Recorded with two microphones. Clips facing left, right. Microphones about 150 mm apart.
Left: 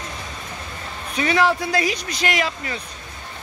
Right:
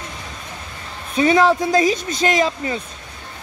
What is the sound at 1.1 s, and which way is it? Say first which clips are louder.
Speech: right 5 dB; 25° right (ahead or behind).